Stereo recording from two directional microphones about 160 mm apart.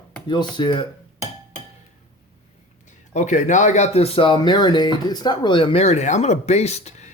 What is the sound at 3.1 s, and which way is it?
Speech, 50° left (ahead or behind).